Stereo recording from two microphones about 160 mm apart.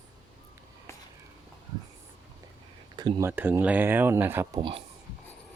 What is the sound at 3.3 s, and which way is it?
Speech, 15° right (ahead or behind).